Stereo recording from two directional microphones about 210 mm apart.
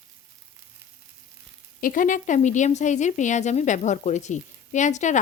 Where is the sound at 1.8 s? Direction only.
40° left (ahead or behind).